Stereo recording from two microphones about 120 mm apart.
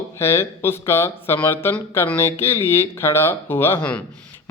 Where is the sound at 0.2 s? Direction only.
20° left (ahead or behind).